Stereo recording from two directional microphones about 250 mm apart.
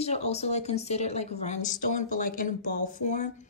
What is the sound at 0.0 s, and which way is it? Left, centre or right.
Speech, left.